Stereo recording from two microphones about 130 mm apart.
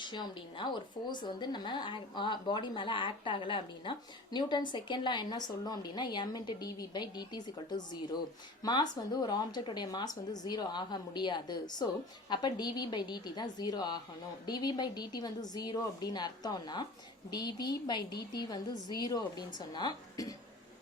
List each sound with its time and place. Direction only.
0.0 s speech: 35° left (ahead or behind)